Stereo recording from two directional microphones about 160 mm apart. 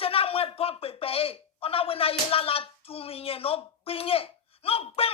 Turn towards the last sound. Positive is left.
turn(degrees=35)  # may be behind; listen again after turning